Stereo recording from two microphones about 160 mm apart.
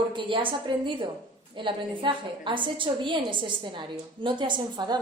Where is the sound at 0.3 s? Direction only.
30° right (ahead or behind).